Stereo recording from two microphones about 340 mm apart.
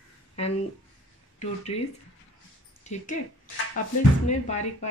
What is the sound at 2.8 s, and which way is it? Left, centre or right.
Speech, left.